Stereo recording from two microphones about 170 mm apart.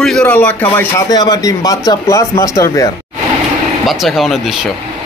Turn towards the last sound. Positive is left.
turn(degrees=0)  # may be behind; listen again after turning